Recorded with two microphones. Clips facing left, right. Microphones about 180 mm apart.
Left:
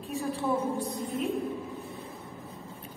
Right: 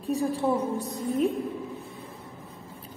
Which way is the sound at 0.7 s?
45° right (ahead or behind).